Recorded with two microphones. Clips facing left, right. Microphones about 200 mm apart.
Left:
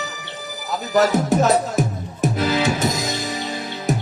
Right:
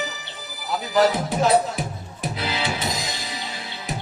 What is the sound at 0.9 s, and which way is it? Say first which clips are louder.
Music: left 3 dB; 45° left (ahead or behind).